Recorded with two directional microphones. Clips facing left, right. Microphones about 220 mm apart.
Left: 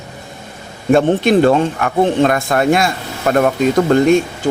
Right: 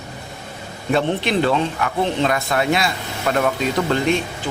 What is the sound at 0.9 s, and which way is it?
Speech, 45° left (ahead or behind).